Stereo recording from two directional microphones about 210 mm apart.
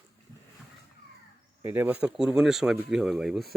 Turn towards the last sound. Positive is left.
turn(degrees=0)  # may be behind; listen again after turning